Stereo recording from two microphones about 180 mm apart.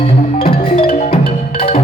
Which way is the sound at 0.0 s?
30° left (ahead or behind).